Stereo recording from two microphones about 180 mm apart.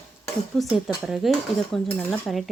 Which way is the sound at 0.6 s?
Centre (ahead or behind).